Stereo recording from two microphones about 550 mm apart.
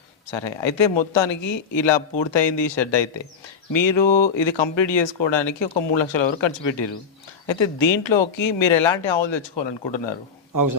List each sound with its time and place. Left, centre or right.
0.3 s speech: left
10.5 s a man's voice: right